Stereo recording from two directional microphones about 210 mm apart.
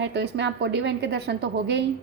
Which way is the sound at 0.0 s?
55° right (ahead or behind).